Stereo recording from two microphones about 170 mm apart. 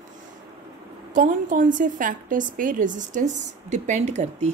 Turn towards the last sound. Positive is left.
turn(degrees=-40)  # may be behind; listen again after turning